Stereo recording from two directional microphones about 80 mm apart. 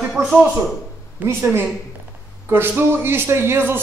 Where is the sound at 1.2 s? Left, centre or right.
Right.